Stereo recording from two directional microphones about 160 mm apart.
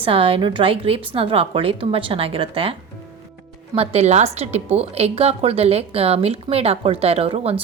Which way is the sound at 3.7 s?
40° right (ahead or behind).